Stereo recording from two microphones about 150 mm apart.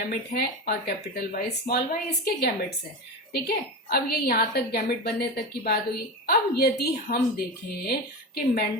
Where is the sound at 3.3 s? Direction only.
90° left.